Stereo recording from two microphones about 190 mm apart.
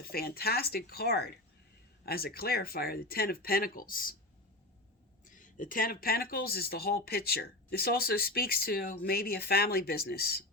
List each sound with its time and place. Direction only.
0.0 s speech: 55° left (ahead or behind)
5.2 s speech: 45° left (ahead or behind)